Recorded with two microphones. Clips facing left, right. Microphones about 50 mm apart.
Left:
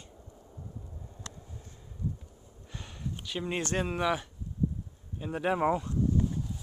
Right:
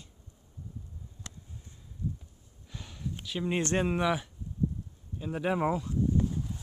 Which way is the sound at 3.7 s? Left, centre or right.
Centre.